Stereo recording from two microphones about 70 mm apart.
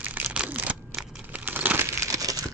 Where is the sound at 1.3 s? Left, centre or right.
Right.